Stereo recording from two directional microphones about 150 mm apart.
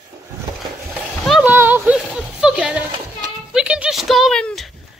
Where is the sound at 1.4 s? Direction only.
10° right (ahead or behind).